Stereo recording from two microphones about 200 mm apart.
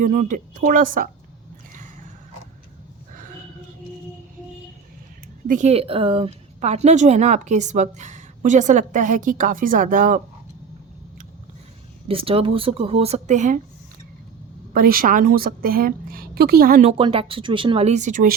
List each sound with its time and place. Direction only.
0.0 s speech: 40° right (ahead or behind)
5.5 s speech: 35° right (ahead or behind)
12.0 s speech: 30° right (ahead or behind)
14.7 s a woman's voice: 50° right (ahead or behind)
17.0 s speech: 30° right (ahead or behind)